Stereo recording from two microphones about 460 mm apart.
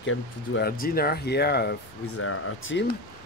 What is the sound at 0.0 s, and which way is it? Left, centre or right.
Speech, left.